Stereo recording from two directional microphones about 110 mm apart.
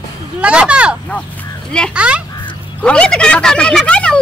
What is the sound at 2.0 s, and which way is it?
Speech, 10° right (ahead or behind).